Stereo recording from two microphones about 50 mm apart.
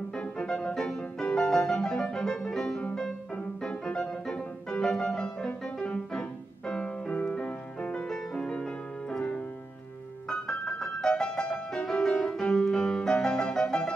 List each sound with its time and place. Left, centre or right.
0.4 s music: left
6.7 s piano: left
7.4 s music: left
10.3 s music: centre